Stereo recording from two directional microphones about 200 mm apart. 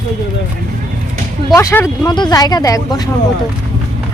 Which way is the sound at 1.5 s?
15° left (ahead or behind).